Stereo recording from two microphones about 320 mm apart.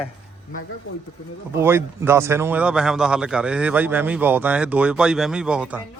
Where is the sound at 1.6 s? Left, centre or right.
Centre.